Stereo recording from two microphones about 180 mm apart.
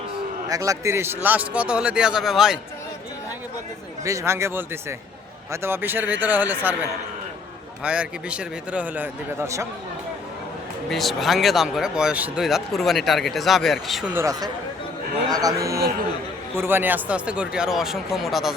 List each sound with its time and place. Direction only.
0.4 s a man's voice: 20° right (ahead or behind); by 2.6 s centre (ahead or behind)
4.0 s a man's voice: 15° right (ahead or behind)
7.9 s a man's voice: 5° right (ahead or behind)
10.8 s speech: centre (ahead or behind)
14.2 s a man's voice: 20° right (ahead or behind); by 18.5 s centre (ahead or behind)